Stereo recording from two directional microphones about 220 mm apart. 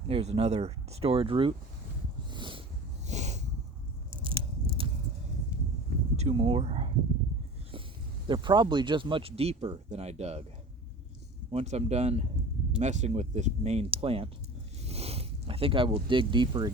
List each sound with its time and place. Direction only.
0.1 s speech: 30° right (ahead or behind)
2.3 s a sound: 20° right (ahead or behind)
3.1 s snort: 30° right (ahead or behind)
4.1 s biting: 25° right (ahead or behind)
5.5 s a sound: 5° right (ahead or behind)
6.1 s speech: 30° right (ahead or behind)
8.3 s speech: 20° right (ahead or behind)
11.5 s speech: 30° right (ahead or behind)
14.8 s a sound: 30° right (ahead or behind)